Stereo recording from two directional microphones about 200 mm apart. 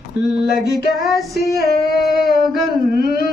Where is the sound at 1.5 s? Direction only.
Centre (ahead or behind).